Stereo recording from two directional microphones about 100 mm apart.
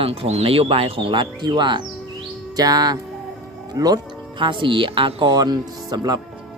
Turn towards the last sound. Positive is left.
turn(degrees=-40)  # may be behind; listen again after turning